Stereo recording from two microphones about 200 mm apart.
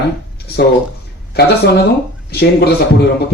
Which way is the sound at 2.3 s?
55° left (ahead or behind).